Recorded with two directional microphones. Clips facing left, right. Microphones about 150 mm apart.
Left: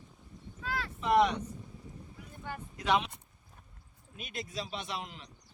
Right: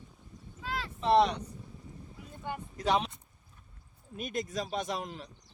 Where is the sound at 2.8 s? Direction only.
35° right (ahead or behind).